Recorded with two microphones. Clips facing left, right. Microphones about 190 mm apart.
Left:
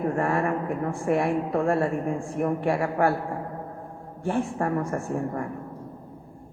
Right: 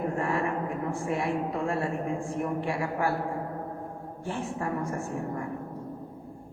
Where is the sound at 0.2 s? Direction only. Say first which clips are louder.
Left 4 dB; 55° left (ahead or behind).